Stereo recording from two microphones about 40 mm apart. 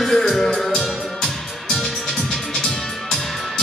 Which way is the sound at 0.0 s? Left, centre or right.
Centre.